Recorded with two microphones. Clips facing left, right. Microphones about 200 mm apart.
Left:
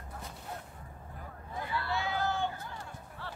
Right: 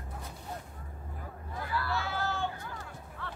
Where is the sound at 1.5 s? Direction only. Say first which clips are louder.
Right 1 dB; 25° left (ahead or behind).